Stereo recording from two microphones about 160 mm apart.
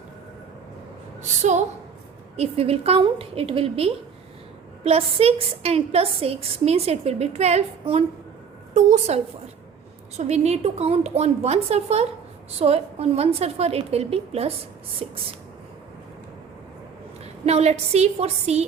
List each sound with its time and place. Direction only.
1.2 s a woman's voice: 45° right (ahead or behind)
17.4 s a woman's voice: 40° right (ahead or behind)